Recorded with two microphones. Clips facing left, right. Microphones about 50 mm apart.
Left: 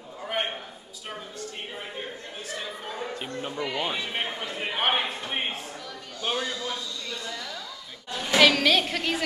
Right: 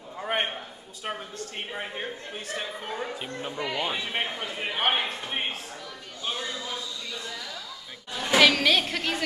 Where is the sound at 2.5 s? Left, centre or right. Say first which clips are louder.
Right 2 dB; right.